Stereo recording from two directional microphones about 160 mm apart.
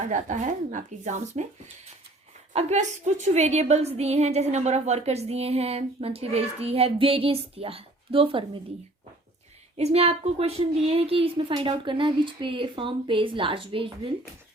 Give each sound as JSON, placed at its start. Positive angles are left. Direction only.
{"t": 0.1, "sound": "speech", "side_deg": -50}
{"t": 2.5, "sound": "a woman's voice", "side_deg": -45}
{"t": 9.7, "sound": "a woman's voice", "side_deg": -40}